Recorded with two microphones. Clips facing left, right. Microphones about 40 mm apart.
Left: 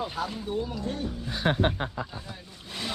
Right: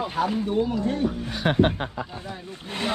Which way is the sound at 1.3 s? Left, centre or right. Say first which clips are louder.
Right 3 dB; right.